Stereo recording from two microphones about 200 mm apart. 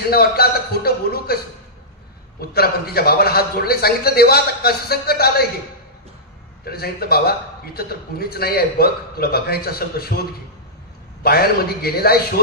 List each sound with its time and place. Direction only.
0.1 s a man's voice: 50° left (ahead or behind)
2.5 s a man's voice: 50° left (ahead or behind)
6.6 s a man's voice: 50° left (ahead or behind)
11.2 s a man's voice: 50° left (ahead or behind)